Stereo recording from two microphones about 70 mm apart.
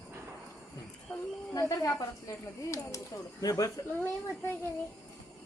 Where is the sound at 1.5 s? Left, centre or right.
Left.